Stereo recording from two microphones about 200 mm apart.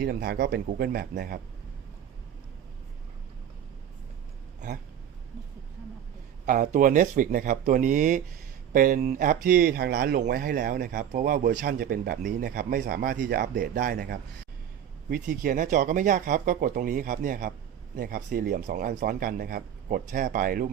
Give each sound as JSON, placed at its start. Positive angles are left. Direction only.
{"t": 0.0, "sound": "speech", "side_deg": -55}
{"t": 6.4, "sound": "speech", "side_deg": -40}
{"t": 11.4, "sound": "speech", "side_deg": -50}